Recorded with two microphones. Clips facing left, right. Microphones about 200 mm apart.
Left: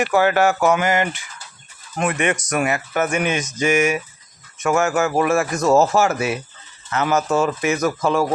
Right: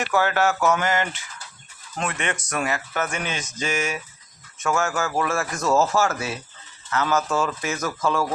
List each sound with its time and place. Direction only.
0.0 s speech: 15° left (ahead or behind)